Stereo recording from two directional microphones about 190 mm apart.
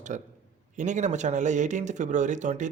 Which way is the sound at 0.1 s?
40° right (ahead or behind).